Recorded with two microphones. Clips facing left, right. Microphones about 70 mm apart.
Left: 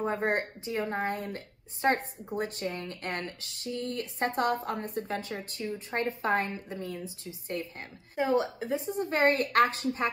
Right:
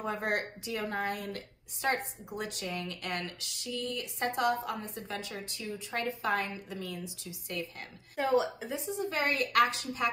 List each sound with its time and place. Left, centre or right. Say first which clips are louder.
0.0 s a woman's voice: left 4 dB; left